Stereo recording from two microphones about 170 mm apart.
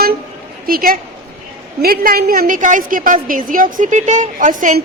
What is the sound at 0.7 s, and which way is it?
A woman's voice, 60° right (ahead or behind).